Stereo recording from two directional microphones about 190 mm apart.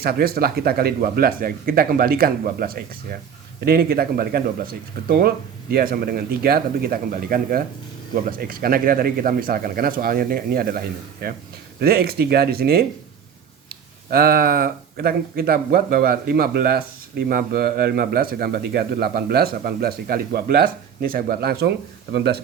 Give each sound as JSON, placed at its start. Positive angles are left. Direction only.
{"t": 0.0, "sound": "speech", "side_deg": -55}